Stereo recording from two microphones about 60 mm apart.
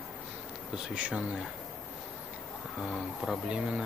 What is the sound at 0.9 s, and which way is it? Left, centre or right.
Speech, centre.